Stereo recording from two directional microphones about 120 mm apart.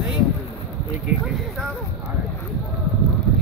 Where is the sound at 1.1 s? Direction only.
10° right (ahead or behind).